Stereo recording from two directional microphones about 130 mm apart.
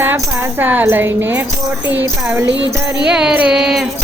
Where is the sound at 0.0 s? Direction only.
15° right (ahead or behind).